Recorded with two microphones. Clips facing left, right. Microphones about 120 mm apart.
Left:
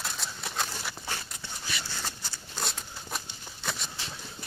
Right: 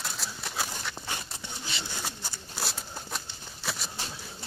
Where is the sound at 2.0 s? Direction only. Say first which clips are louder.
Right 1 dB; 10° right (ahead or behind).